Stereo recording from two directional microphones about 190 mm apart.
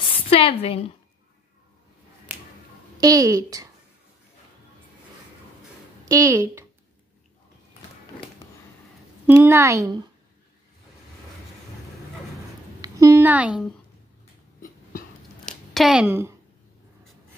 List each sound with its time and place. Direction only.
0.1 s a woman's voice: 30° left (ahead or behind)
3.0 s a woman's voice: 20° right (ahead or behind)
6.0 s speech: 15° right (ahead or behind)
9.2 s speech: 10° right (ahead or behind)
12.8 s a woman's voice: 15° right (ahead or behind)
14.6 s a sound: 50° left (ahead or behind)
15.4 s a sound: centre (ahead or behind)